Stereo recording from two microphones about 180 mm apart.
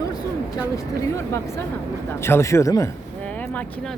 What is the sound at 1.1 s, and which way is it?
A man's voice, 15° left (ahead or behind).